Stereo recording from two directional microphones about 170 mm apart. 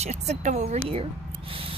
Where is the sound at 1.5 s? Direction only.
30° right (ahead or behind).